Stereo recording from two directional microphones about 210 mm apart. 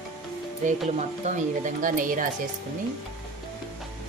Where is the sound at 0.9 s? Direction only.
35° right (ahead or behind).